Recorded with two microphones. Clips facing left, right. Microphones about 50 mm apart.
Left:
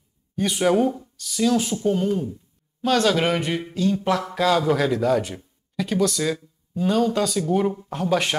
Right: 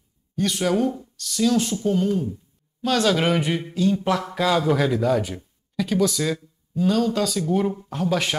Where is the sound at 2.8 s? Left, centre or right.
Centre.